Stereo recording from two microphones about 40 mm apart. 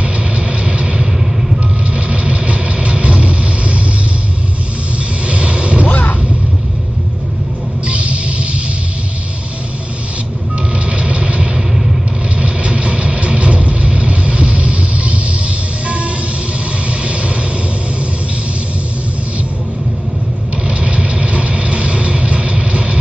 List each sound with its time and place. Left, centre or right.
0.0 s vehicle: right
2.0 s vehicle: right
5.2 s a sound: right
5.9 s a sound: left
7.8 s music: right
10.9 s vehicle: right
20.6 s vehicle: right